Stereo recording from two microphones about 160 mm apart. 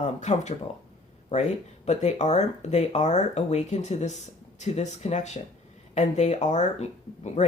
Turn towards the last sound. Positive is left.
turn(degrees=45)  # may be behind; listen again after turning